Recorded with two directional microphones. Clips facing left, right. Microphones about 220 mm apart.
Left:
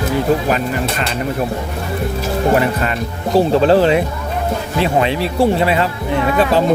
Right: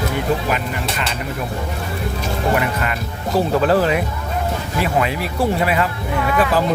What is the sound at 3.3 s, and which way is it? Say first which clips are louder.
Speech: left 4 dB; 30° left (ahead or behind).